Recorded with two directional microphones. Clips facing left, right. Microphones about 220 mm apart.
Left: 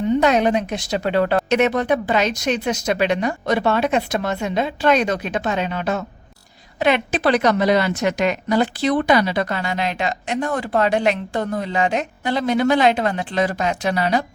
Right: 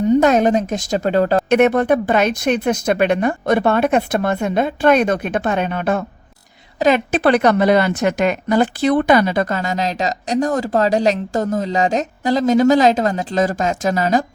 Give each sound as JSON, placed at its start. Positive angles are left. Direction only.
{"t": 0.2, "sound": "speech", "side_deg": -45}
{"t": 1.5, "sound": "speech", "side_deg": -55}
{"t": 6.7, "sound": "a woman's voice", "side_deg": -40}
{"t": 7.1, "sound": "speech", "side_deg": -55}